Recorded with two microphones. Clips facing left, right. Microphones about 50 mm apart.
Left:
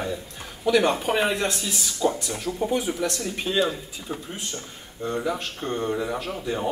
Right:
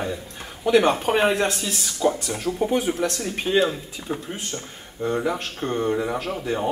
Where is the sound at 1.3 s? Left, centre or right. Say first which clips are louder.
Right 3 dB; right.